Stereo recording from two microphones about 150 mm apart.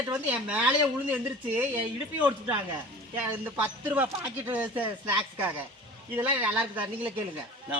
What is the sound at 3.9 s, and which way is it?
Speech, 10° right (ahead or behind).